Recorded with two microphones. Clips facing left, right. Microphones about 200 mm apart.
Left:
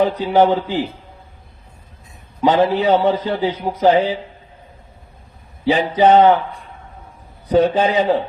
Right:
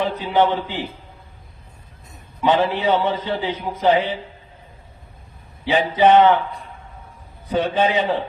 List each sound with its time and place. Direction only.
0.0 s a man's voice: 40° left (ahead or behind)
2.4 s a man's voice: 40° left (ahead or behind)
5.6 s a man's voice: 40° left (ahead or behind)
7.5 s a man's voice: 40° left (ahead or behind)